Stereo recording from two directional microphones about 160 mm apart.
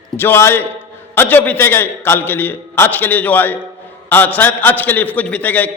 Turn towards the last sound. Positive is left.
turn(degrees=10)  # may be behind; listen again after turning